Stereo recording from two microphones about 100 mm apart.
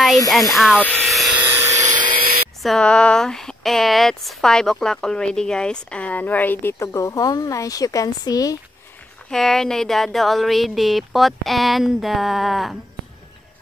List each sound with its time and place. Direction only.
0.3 s speech: centre (ahead or behind)
0.7 s speech: 15° left (ahead or behind)
1.0 s a sound: centre (ahead or behind)
1.3 s electric toothbrush: 20° right (ahead or behind)
1.7 s a sound: 40° right (ahead or behind)
2.6 s speech: 5° left (ahead or behind); by 8.5 s 35° left (ahead or behind)
9.3 s speech: 5° left (ahead or behind)